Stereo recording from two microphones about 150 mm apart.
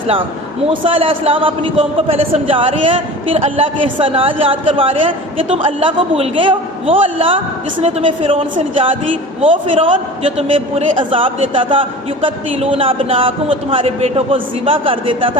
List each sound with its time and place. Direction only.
0.7 s a man's voice: 35° right (ahead or behind)
9.5 s a man's voice: 35° right (ahead or behind)